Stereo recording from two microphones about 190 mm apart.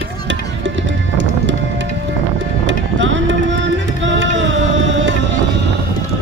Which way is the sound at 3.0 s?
75° right (ahead or behind).